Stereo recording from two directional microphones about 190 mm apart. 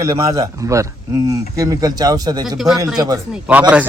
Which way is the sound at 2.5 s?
Centre (ahead or behind).